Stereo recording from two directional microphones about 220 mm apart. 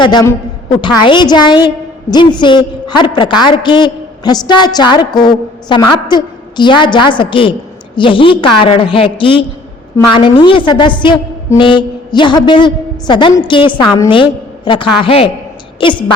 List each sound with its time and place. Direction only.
0.0 s a man's voice: 15° left (ahead or behind)